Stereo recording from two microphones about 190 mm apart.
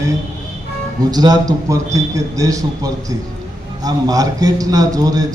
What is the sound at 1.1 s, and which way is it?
A man's voice, 20° right (ahead or behind).